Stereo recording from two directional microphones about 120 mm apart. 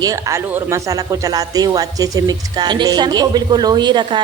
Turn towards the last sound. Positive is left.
turn(degrees=-40)  # may be behind; listen again after turning